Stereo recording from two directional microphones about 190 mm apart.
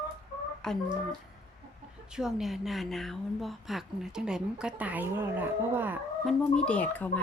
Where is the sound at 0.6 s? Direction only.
5° left (ahead or behind).